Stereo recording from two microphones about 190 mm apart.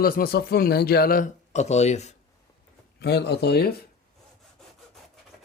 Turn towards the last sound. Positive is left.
turn(degrees=55)  # may be behind; listen again after turning